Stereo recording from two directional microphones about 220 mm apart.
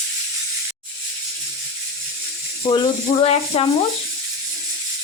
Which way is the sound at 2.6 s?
20° left (ahead or behind).